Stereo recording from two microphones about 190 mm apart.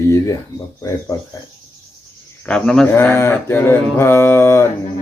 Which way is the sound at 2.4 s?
5° left (ahead or behind).